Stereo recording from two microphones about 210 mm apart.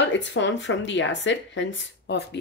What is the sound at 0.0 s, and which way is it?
Speech, 60° left (ahead or behind).